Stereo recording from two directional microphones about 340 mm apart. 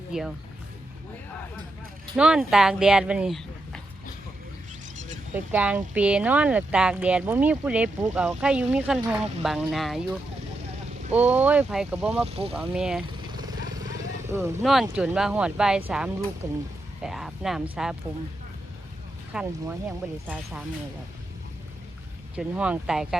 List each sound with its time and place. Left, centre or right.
0.1 s speech: centre
2.1 s speech: centre
5.3 s speech: centre
12.2 s speech: centre
12.5 s speech: centre
14.3 s speech: centre
19.3 s speech: centre
22.4 s speech: centre